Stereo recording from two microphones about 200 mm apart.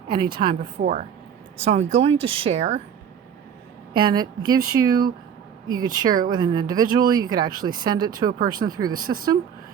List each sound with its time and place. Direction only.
0.1 s speech: 25° right (ahead or behind)
0.8 s speech: 35° right (ahead or behind)
3.9 s speech: 20° right (ahead or behind)